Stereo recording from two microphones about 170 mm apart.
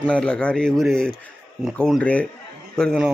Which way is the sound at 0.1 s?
5° left (ahead or behind).